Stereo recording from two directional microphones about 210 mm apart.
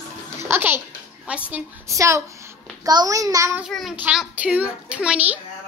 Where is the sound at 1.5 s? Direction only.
10° right (ahead or behind).